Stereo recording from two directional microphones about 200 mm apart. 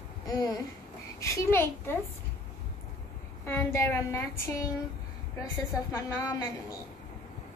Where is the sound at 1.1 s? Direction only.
15° left (ahead or behind).